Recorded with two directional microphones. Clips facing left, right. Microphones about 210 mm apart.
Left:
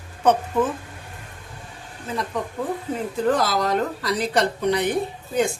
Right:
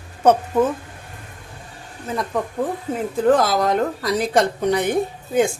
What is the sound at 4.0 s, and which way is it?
Speech, 50° right (ahead or behind).